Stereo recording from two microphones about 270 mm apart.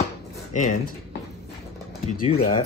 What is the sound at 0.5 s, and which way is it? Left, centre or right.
Speech, left.